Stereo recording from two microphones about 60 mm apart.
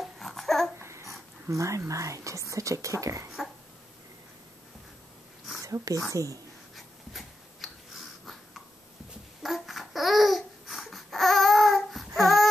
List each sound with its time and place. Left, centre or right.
0.0 s babbling: centre
0.7 s babbling: right
1.5 s speech: right
5.6 s speech: right
7.1 s a sound: centre
9.4 s babbling: centre